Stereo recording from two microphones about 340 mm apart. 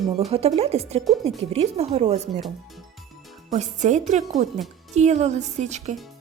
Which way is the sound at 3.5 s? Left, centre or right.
Centre.